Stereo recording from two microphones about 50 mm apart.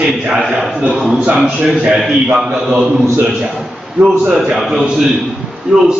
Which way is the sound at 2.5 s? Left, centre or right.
Right.